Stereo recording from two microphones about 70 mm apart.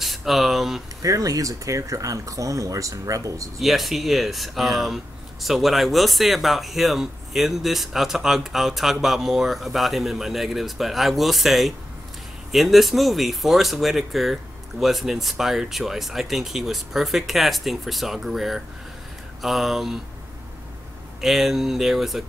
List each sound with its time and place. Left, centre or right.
0.0 s a sound: centre
1.0 s speech: right
3.5 s speech: centre
21.2 s speech: centre